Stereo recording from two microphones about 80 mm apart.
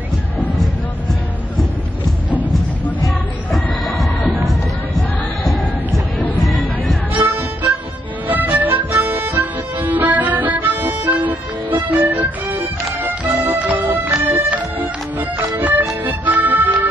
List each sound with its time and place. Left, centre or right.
3.5 s music: centre
6.4 s music: centre
7.2 s music: right